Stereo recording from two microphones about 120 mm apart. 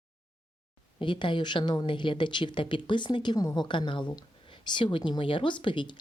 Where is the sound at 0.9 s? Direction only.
45° left (ahead or behind).